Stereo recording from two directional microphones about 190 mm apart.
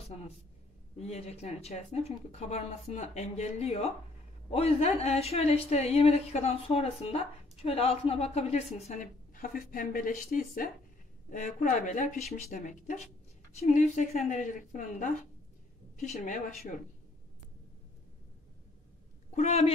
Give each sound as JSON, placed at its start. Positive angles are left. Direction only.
{"t": 0.9, "sound": "speech", "side_deg": 35}
{"t": 19.3, "sound": "speech", "side_deg": 35}